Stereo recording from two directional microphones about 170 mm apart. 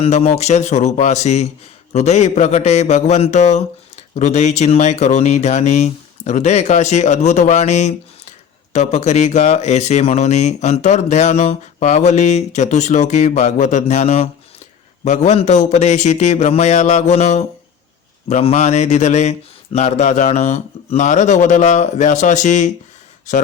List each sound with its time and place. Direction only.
0.0 s speech: 35° left (ahead or behind)